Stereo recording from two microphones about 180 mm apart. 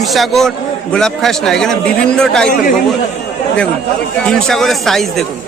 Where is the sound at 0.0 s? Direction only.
Centre (ahead or behind).